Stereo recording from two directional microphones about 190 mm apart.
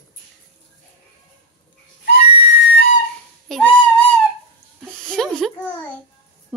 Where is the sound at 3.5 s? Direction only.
5° left (ahead or behind).